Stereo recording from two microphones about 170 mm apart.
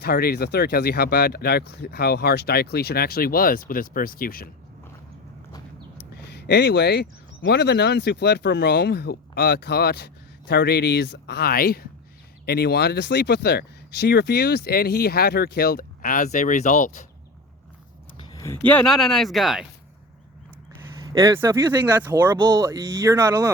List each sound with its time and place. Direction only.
0.0 s speech: 65° left (ahead or behind)
6.3 s speech: 80° left; by 17.1 s 45° left (ahead or behind)
18.2 s speech: 25° left (ahead or behind); by 19.6 s centre (ahead or behind)
21.1 s speech: 15° right (ahead or behind)
22.3 s speech: 25° right (ahead or behind)